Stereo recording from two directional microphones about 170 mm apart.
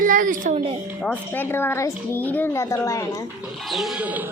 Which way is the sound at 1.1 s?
10° left (ahead or behind).